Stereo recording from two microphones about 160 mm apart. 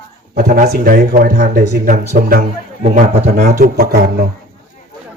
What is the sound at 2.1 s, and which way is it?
Speech, 65° right (ahead or behind).